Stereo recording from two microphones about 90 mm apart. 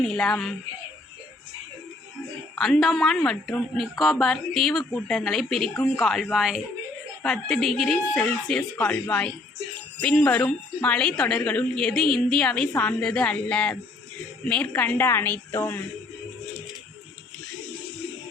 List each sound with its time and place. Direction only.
0.0 s a woman's voice: 5° left (ahead or behind)
2.6 s a woman's voice: centre (ahead or behind); by 15.8 s 20° left (ahead or behind)